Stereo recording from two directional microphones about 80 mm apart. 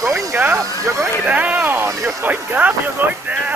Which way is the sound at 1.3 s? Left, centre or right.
Centre.